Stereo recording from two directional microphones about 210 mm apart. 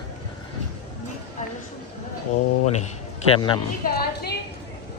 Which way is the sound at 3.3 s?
20° left (ahead or behind).